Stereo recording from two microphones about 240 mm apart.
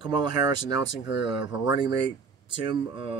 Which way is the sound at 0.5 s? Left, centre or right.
Left.